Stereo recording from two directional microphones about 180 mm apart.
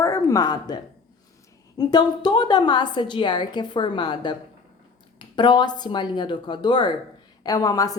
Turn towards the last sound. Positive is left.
turn(degrees=20)  # may be behind; listen again after turning